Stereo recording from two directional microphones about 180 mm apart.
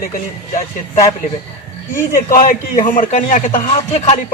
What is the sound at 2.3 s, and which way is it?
A man's voice, 45° left (ahead or behind).